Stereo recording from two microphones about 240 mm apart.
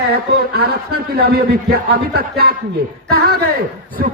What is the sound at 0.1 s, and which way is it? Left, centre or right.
A man's voice, right.